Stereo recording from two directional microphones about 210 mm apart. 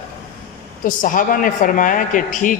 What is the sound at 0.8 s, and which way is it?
A man's voice, 40° left (ahead or behind).